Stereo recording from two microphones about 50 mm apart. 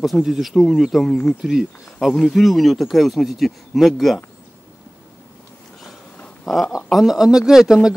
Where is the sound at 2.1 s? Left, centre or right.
Centre.